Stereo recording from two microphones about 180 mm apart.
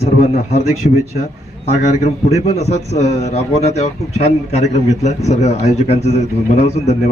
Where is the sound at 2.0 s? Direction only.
35° left (ahead or behind).